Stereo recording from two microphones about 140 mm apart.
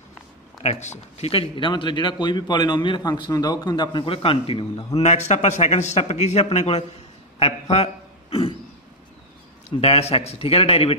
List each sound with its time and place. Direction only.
0.6 s speech: 55° left (ahead or behind)
5.0 s a man's voice: 55° left (ahead or behind)
7.3 s a sound: 45° left (ahead or behind)
9.7 s a man's voice: 45° left (ahead or behind)